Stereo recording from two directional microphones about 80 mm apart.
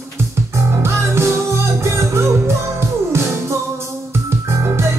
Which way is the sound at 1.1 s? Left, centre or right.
Right.